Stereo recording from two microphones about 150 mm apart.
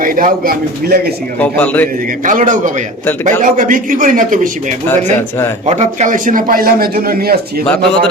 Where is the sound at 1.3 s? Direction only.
10° left (ahead or behind).